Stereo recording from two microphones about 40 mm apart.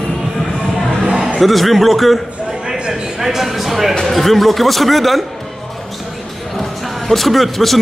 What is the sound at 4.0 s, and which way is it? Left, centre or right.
A man's voice, centre.